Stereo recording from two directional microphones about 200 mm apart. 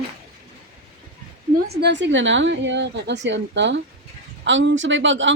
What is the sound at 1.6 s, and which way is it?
A woman's voice, 60° right (ahead or behind).